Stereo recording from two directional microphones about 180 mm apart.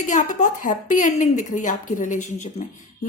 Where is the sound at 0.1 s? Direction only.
45° left (ahead or behind).